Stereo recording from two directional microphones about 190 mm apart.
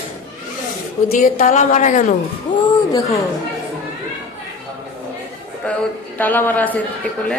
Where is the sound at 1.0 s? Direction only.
40° left (ahead or behind).